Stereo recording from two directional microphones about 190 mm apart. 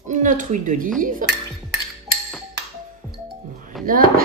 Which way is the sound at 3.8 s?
Centre (ahead or behind).